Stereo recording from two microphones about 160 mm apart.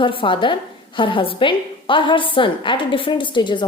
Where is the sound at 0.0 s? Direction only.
30° left (ahead or behind).